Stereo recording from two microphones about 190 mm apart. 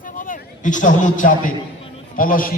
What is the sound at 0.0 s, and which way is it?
Bleat, 45° left (ahead or behind).